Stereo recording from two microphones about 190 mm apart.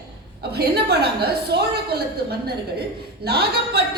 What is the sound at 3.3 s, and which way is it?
Speech, 55° right (ahead or behind).